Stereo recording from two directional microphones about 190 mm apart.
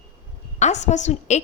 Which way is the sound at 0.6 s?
35° left (ahead or behind).